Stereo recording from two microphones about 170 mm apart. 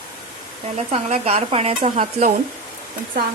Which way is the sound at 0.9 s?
40° right (ahead or behind).